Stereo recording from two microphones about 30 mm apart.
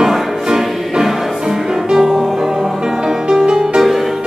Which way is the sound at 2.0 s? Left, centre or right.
Centre.